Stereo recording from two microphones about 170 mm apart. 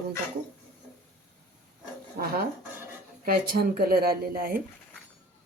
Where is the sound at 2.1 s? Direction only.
60° right (ahead or behind).